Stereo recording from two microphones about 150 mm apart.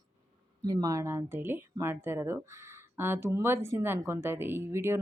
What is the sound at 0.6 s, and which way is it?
Speech, 25° right (ahead or behind).